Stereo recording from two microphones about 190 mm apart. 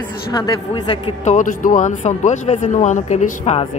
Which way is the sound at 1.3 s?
40° left (ahead or behind).